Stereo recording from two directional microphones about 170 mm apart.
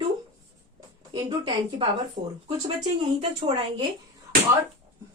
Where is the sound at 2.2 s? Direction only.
40° right (ahead or behind).